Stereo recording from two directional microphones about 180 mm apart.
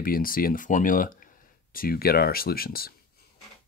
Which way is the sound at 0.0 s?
50° left (ahead or behind).